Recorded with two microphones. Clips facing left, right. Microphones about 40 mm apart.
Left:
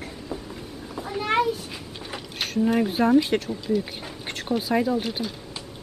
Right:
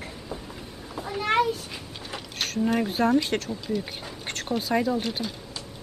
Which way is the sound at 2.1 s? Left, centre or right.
Centre.